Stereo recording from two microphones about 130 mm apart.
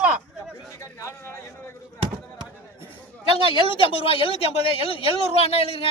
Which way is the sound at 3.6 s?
45° left (ahead or behind).